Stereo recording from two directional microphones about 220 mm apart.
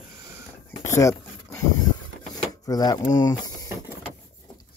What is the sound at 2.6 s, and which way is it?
Speech, 15° left (ahead or behind).